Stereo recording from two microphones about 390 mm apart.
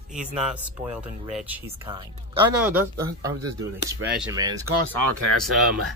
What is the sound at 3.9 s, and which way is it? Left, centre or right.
Speech, centre.